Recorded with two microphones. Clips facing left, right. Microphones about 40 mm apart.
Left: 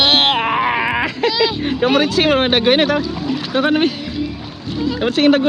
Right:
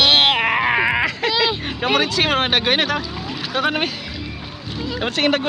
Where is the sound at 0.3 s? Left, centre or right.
Centre.